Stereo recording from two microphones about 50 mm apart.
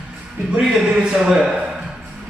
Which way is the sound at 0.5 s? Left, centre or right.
Centre.